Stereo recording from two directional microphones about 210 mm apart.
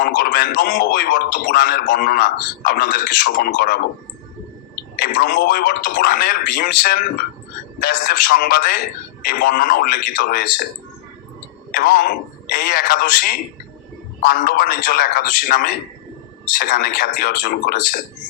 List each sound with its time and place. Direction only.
0.0 s a man's voice: 40° left (ahead or behind)
4.9 s a man's voice: 45° left (ahead or behind)
11.7 s a man's voice: 45° left (ahead or behind)